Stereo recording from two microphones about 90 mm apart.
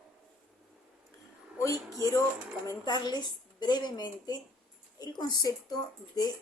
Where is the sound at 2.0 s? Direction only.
40° left (ahead or behind).